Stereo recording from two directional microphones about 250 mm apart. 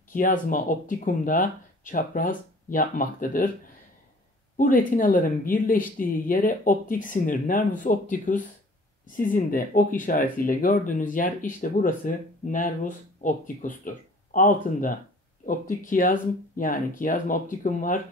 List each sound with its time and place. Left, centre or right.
0.1 s speech: left
4.6 s speech: left